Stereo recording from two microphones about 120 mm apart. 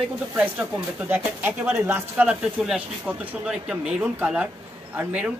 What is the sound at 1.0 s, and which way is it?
Speech, 15° right (ahead or behind).